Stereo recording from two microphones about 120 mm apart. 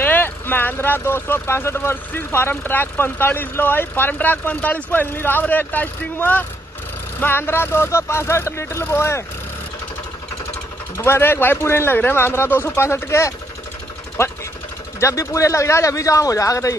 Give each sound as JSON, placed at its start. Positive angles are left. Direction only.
{"t": 0.0, "sound": "speech", "side_deg": 15}
{"t": 11.0, "sound": "speech", "side_deg": 20}
{"t": 15.0, "sound": "speech", "side_deg": 25}